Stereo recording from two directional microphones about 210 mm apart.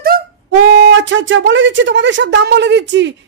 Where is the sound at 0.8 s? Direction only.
65° right (ahead or behind).